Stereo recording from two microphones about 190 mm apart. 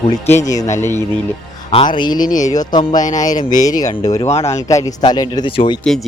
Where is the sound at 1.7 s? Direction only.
25° left (ahead or behind).